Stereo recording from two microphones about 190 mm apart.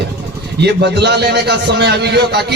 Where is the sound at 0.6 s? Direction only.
60° right (ahead or behind).